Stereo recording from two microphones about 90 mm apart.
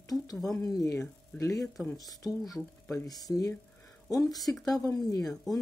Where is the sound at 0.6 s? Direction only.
40° left (ahead or behind).